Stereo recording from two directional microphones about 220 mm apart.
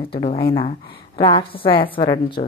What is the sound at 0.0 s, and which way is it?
A woman's voice, 25° left (ahead or behind).